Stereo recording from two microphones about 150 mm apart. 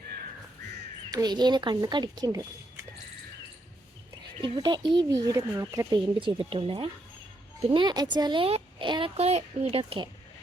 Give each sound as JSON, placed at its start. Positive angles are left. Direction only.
{"t": 1.1, "sound": "a woman's voice", "side_deg": -25}
{"t": 4.4, "sound": "a woman's voice", "side_deg": -30}
{"t": 6.1, "sound": "speech", "side_deg": -35}